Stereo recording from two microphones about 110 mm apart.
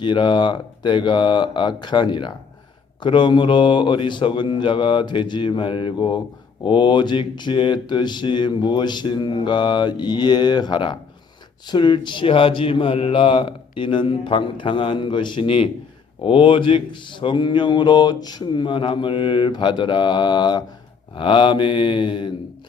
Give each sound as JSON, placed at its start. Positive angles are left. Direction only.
{"t": 0.0, "sound": "a man's voice", "side_deg": 45}